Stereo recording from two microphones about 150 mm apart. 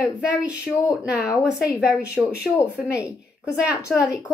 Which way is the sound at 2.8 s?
5° right (ahead or behind).